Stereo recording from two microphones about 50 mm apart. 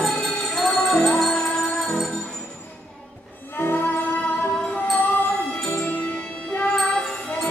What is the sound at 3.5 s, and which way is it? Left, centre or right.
Music, left.